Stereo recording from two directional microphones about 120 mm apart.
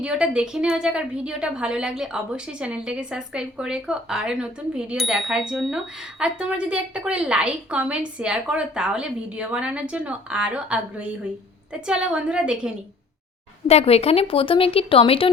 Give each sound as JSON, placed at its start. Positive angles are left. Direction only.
{"t": 0.0, "sound": "a woman's voice", "side_deg": -10}
{"t": 13.7, "sound": "a woman's voice", "side_deg": 60}